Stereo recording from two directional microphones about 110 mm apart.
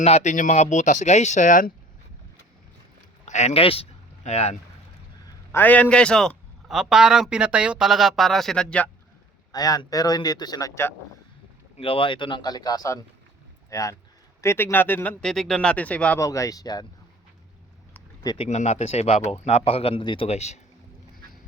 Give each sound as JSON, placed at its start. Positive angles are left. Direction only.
{"t": 0.0, "sound": "speech", "side_deg": 85}
{"t": 3.2, "sound": "speech", "side_deg": 90}
{"t": 5.5, "sound": "a man's voice", "side_deg": 20}
{"t": 9.5, "sound": "speech", "side_deg": 35}
{"t": 11.8, "sound": "a man's voice", "side_deg": 55}
{"t": 15.2, "sound": "speech", "side_deg": 5}
{"t": 16.1, "sound": "speech", "side_deg": 30}
{"t": 18.3, "sound": "speech", "side_deg": 90}
{"t": 20.3, "sound": "speech", "side_deg": 90}